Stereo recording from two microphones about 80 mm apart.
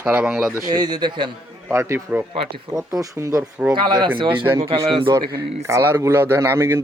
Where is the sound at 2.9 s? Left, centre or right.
Right.